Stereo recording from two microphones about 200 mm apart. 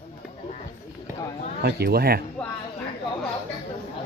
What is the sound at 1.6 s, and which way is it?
Speech, 50° right (ahead or behind).